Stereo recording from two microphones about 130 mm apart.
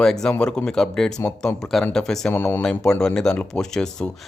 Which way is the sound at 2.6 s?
5° left (ahead or behind).